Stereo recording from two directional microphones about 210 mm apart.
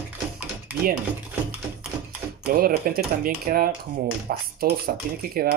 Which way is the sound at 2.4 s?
45° right (ahead or behind).